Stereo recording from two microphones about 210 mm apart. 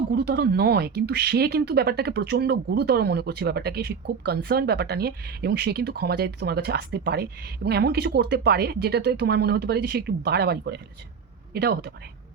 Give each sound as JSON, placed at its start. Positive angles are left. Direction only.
{"t": 0.1, "sound": "speech", "side_deg": -50}